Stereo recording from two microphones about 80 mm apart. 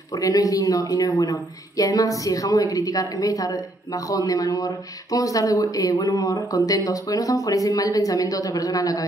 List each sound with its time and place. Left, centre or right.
0.1 s speech: left